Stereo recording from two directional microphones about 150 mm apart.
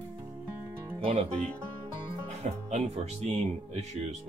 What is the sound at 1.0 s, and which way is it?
Speech, 40° right (ahead or behind).